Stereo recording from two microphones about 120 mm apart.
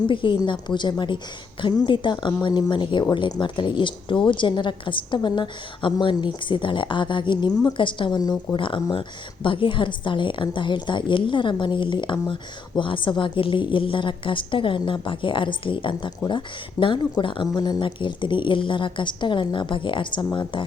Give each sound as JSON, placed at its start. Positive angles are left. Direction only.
{"t": 0.1, "sound": "a woman's voice", "side_deg": 45}